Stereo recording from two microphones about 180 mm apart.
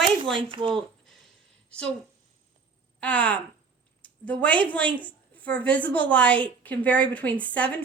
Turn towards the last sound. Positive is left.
turn(degrees=10)  # may be behind; listen again after turning